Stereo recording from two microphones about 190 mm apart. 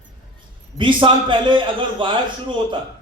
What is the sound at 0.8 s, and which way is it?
A man's voice, 25° right (ahead or behind).